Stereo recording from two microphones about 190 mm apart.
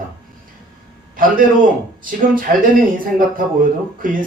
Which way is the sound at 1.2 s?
45° right (ahead or behind).